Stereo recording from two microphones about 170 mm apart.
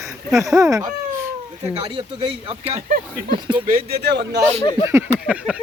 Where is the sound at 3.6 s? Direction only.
60° right (ahead or behind); by 4.4 s 80° right.